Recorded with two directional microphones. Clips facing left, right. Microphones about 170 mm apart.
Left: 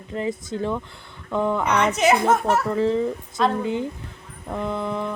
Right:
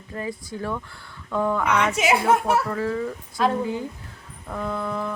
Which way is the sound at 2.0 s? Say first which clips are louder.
Left 2 dB; 10° right (ahead or behind).